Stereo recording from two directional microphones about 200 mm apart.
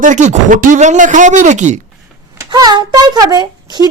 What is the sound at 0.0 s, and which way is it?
Speech, 40° right (ahead or behind).